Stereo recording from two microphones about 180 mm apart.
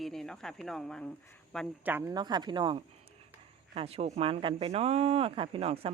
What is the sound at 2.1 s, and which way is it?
Speech, 25° right (ahead or behind).